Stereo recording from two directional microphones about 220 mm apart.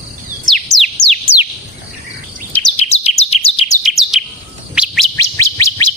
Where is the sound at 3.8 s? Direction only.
Centre (ahead or behind).